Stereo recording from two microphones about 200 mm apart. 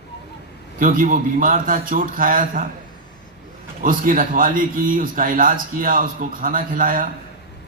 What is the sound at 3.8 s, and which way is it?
A man's voice, 45° right (ahead or behind).